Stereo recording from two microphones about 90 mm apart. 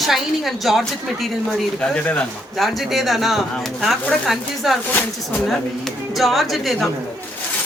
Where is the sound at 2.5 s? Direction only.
Centre (ahead or behind).